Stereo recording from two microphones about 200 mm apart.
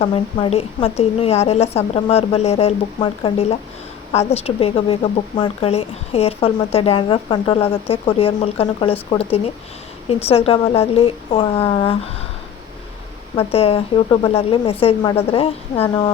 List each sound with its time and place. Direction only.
0.0 s a woman's voice: 25° left (ahead or behind)
13.3 s a woman's voice: 30° left (ahead or behind)